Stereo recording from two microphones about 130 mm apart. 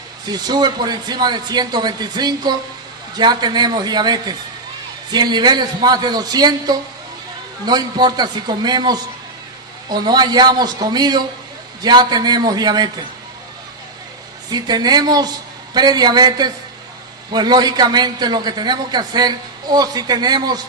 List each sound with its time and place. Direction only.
0.3 s a man's voice: 35° right (ahead or behind)
14.5 s a man's voice: 30° right (ahead or behind)